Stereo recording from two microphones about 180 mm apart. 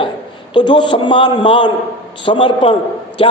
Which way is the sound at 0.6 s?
25° left (ahead or behind).